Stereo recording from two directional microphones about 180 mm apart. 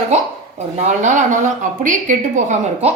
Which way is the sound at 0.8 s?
40° right (ahead or behind).